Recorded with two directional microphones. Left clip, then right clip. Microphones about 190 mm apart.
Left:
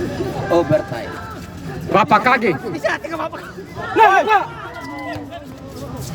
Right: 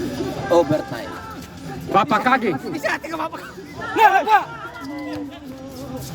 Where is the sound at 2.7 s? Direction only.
45° right (ahead or behind).